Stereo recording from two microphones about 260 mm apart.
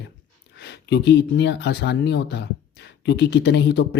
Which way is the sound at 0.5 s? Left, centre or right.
Left.